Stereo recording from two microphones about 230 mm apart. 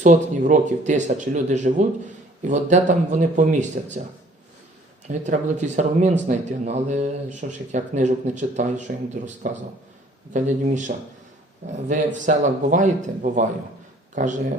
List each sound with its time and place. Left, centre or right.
0.0 s speech: right
5.0 s speech: right